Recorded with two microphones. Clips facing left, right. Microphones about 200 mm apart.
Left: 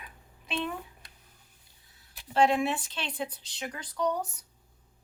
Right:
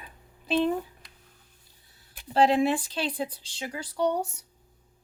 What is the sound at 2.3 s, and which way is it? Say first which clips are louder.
A woman's voice: right 3 dB; 35° right (ahead or behind).